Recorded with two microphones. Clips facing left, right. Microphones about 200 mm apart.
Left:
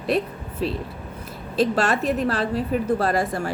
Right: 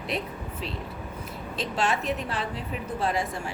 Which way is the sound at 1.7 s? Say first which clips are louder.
Left 6 dB; 80° left.